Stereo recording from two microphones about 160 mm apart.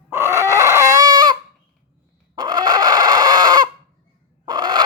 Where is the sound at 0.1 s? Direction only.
15° right (ahead or behind).